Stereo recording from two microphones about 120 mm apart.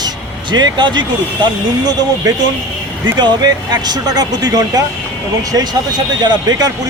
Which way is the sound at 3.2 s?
35° right (ahead or behind).